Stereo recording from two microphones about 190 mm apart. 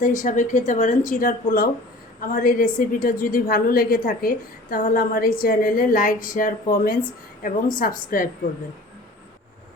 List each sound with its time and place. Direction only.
0.0 s a woman's voice: 40° left (ahead or behind)